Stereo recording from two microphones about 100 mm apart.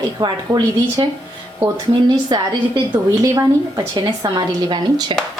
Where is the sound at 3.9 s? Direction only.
45° right (ahead or behind).